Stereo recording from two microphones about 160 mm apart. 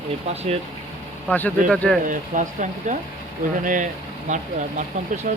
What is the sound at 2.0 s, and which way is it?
Speech, 55° right (ahead or behind).